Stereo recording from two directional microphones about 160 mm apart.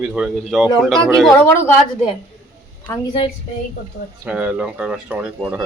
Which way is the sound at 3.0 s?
35° left (ahead or behind).